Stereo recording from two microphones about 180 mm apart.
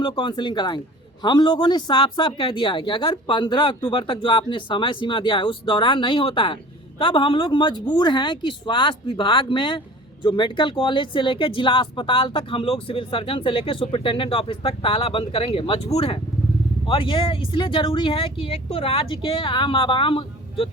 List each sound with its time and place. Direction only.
0.0 s speech: 25° left (ahead or behind)